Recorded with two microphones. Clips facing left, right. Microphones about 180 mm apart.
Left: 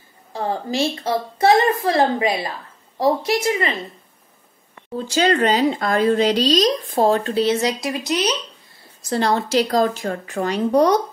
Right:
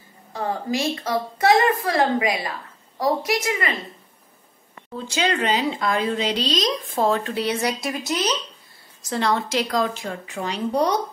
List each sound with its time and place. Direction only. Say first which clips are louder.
0.3 s a woman's voice: left 1 dB; 30° left (ahead or behind)
4.9 s speech: left 5 dB; 40° left (ahead or behind); by 8.3 s 20° left (ahead or behind)
9.1 s speech: left 4 dB; 35° left (ahead or behind)